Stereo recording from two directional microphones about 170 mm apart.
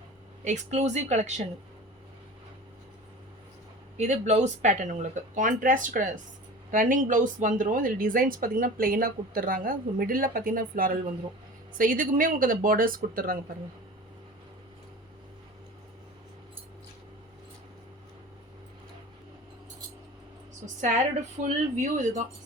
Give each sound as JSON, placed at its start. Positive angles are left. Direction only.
{"t": 0.4, "sound": "speech", "side_deg": -45}
{"t": 3.9, "sound": "speech", "side_deg": -40}
{"t": 21.4, "sound": "speech", "side_deg": -45}